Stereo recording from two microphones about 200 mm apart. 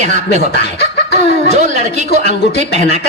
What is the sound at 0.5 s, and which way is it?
Chicken, 55° left (ahead or behind).